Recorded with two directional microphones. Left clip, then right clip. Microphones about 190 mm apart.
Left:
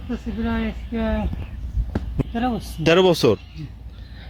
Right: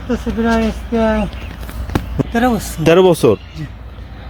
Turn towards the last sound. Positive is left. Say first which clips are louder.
# right 6 dB
turn(degrees=0)  # may be behind; listen again after turning